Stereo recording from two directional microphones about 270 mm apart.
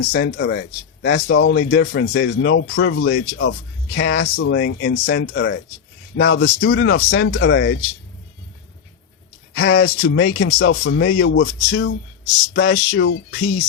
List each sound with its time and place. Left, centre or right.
0.1 s speech: left
9.6 s speech: left